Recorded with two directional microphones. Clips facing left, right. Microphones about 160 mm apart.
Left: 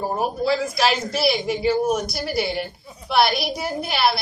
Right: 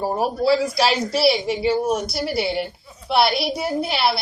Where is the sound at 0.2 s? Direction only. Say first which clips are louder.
Right 4 dB; 30° right (ahead or behind).